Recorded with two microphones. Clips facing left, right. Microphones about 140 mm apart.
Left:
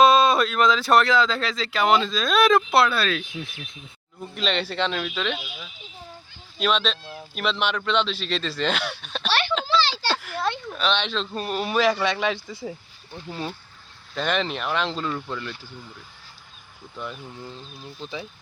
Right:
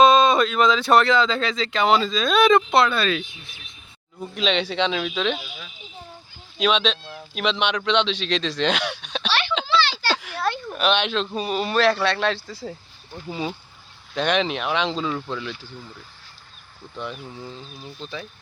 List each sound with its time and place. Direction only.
0.0 s speech: centre (ahead or behind)
4.4 s speech: centre (ahead or behind)
9.3 s a sound: 50° left (ahead or behind)
10.1 s a sound: centre (ahead or behind)
10.7 s speech: 10° right (ahead or behind); by 12.4 s 10° left (ahead or behind)
13.2 s speech: 5° right (ahead or behind)
17.0 s speech: centre (ahead or behind)
18.0 s speech: 15° left (ahead or behind)